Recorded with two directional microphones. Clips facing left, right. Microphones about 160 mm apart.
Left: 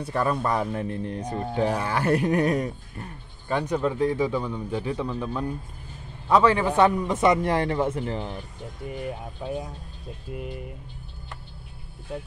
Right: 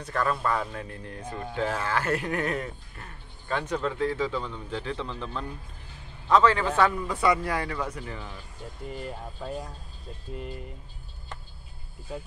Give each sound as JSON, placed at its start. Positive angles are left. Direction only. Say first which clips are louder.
{"t": 0.0, "sound": "a man's voice", "louder": "left 3 dB", "side_deg": 15}
{"t": 8.8, "sound": "speech", "louder": "left 4 dB", "side_deg": 10}
{"t": 10.3, "sound": "speech", "louder": "left 2 dB", "side_deg": 10}